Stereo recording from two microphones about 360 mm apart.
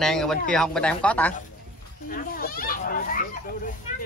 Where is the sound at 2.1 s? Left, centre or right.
Left.